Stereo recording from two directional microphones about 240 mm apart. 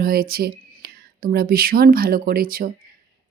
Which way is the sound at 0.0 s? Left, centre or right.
Right.